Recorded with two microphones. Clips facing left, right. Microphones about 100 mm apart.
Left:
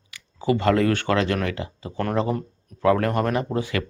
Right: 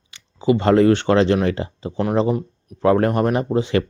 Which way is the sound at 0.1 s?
20° right (ahead or behind).